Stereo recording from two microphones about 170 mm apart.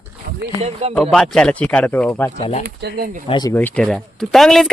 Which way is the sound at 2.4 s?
40° left (ahead or behind).